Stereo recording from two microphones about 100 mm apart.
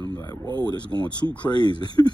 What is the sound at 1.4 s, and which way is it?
Speech, 45° left (ahead or behind).